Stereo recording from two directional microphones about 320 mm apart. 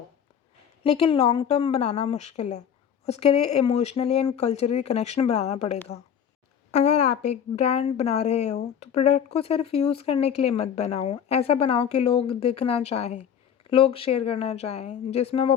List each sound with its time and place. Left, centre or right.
0.9 s a woman's voice: centre